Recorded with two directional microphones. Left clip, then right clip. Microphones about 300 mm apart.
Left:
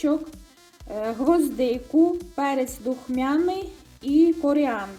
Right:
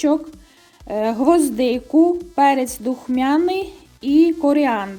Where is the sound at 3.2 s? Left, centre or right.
Right.